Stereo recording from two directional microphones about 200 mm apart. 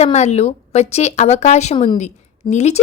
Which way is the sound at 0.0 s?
35° left (ahead or behind).